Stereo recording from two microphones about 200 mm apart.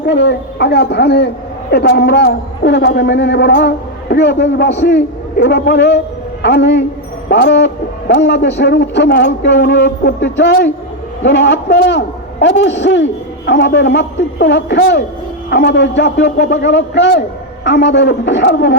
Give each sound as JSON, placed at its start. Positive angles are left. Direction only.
{"t": 0.0, "sound": "speech", "side_deg": 60}